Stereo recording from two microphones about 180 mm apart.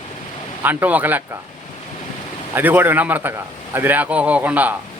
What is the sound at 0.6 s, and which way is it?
Speech, 10° right (ahead or behind).